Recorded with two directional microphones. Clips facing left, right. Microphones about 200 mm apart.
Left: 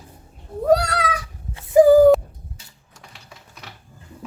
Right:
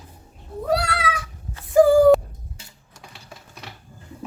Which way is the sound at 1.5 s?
20° left (ahead or behind).